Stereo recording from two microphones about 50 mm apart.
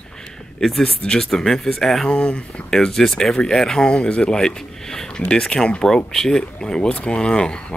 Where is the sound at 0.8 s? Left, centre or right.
Left.